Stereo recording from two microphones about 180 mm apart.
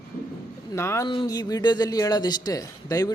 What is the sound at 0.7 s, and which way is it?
A man's voice, 15° left (ahead or behind).